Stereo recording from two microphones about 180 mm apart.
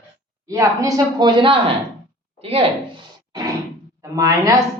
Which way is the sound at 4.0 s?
20° right (ahead or behind).